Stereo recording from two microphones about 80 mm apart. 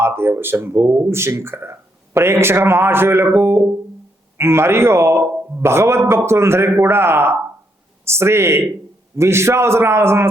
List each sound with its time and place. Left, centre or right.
0.0 s speech: right